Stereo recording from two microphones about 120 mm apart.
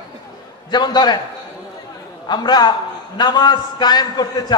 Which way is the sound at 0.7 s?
35° left (ahead or behind).